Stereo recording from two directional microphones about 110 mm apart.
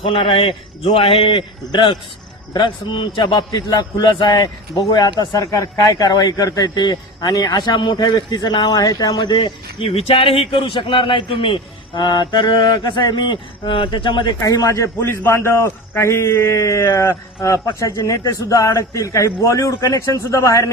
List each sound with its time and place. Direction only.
0.0 s a man's voice: 55° left (ahead or behind)
9.9 s a man's voice: 60° left (ahead or behind)
14.4 s a man's voice: 30° left (ahead or behind)